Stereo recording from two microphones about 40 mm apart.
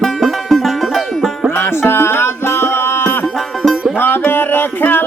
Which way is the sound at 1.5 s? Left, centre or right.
Left.